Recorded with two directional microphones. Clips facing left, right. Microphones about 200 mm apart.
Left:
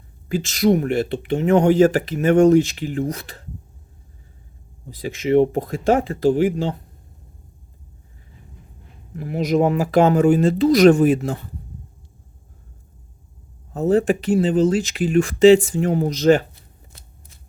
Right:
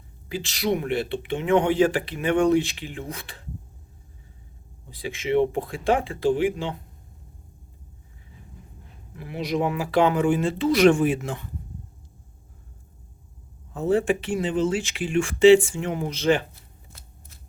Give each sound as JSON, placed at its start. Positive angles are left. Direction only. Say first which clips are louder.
{"t": 0.3, "sound": "speech", "louder": "left 8 dB", "side_deg": 45}
{"t": 4.9, "sound": "speech", "louder": "left 6 dB", "side_deg": 40}
{"t": 9.1, "sound": "speech", "louder": "left 7 dB", "side_deg": 45}
{"t": 13.7, "sound": "speech", "louder": "left 4 dB", "side_deg": 40}